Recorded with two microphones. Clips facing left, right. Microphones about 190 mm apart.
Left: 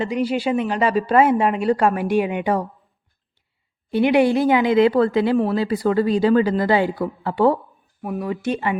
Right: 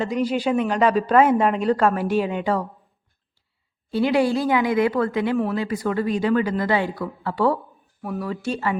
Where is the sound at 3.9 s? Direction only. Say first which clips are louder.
Left 3 dB; 20° left (ahead or behind).